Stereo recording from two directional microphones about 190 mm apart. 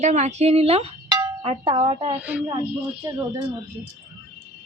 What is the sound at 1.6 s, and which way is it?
Speech, 25° right (ahead or behind).